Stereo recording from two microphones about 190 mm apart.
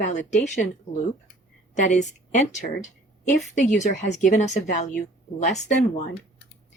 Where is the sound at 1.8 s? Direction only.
40° left (ahead or behind).